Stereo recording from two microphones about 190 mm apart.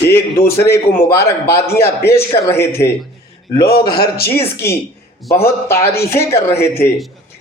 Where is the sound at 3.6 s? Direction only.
55° left (ahead or behind).